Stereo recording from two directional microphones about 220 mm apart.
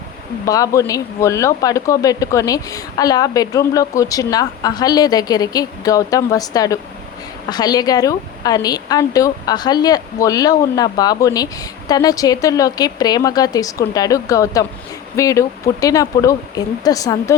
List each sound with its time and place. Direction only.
0.4 s speech: 15° left (ahead or behind)